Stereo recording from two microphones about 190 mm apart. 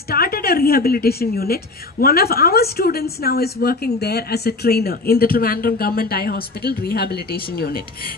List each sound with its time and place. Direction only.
0.1 s a woman's voice: 55° left (ahead or behind)